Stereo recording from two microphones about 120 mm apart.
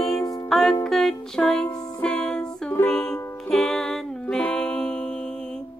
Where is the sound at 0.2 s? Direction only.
30° left (ahead or behind).